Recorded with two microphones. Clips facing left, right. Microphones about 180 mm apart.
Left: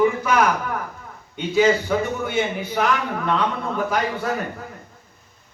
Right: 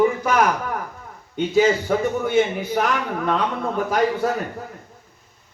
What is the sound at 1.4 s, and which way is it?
A man's voice, 45° right (ahead or behind).